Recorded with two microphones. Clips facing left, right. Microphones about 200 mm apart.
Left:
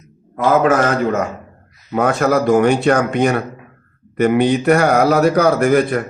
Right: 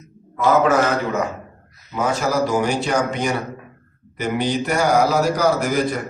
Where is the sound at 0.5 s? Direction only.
50° left (ahead or behind).